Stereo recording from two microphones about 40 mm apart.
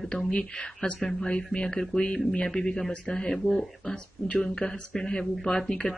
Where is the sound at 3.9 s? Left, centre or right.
Left.